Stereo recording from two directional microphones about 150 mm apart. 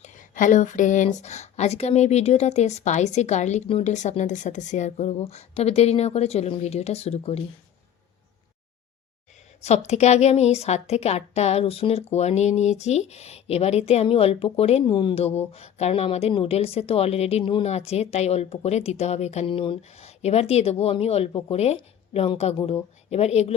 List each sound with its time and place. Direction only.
0.0 s a woman's voice: 60° left (ahead or behind)
9.6 s a woman's voice: 45° left (ahead or behind)
19.8 s a woman's voice: 45° left (ahead or behind)